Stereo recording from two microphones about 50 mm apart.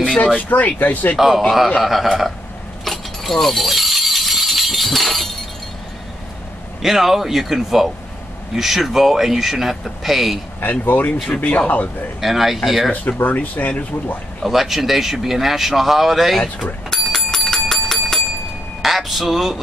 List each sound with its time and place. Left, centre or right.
0.4 s speech: left
1.1 s speech: centre
2.8 s a sound: centre
6.8 s speech: centre
10.6 s speech: left
12.2 s speech: centre
12.9 s speech: left
14.4 s speech: centre
16.9 s bicycle bell: centre
18.8 s a sound: centre